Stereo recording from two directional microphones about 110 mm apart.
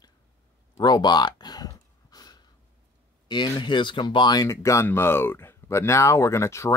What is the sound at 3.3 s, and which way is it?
Speech, 45° left (ahead or behind).